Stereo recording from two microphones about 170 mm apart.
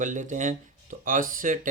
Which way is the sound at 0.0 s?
50° right (ahead or behind).